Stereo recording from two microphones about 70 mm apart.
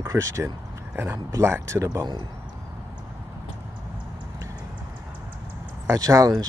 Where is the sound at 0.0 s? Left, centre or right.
Right.